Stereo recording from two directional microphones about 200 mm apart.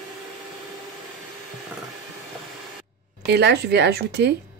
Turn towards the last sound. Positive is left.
turn(degrees=-55)  # may be behind; listen again after turning